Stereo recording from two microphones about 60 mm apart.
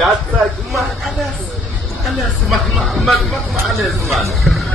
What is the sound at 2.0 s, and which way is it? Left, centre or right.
A man's voice, centre.